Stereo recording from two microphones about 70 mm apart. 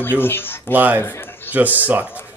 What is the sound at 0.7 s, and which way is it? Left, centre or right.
Speech, right.